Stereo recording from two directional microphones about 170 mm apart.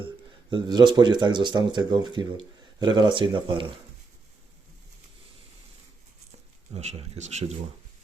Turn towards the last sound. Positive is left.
turn(degrees=-40)  # may be behind; listen again after turning